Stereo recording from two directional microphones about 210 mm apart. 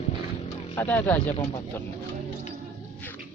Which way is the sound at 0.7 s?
10° left (ahead or behind).